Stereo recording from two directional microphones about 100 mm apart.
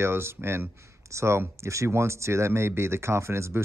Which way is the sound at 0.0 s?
25° right (ahead or behind).